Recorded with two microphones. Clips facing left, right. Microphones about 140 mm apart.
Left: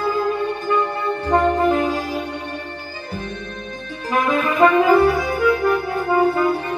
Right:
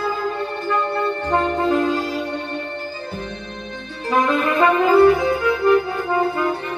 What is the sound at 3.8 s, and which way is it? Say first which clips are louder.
Music: right 2 dB; 10° left (ahead or behind).